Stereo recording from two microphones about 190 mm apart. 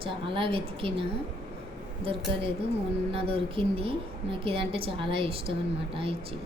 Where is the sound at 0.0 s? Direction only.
25° right (ahead or behind).